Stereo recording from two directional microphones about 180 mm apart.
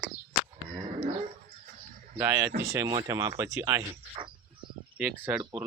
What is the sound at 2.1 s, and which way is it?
Speech, 10° right (ahead or behind).